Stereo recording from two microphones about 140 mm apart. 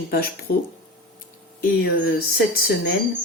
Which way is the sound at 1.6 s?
90° left.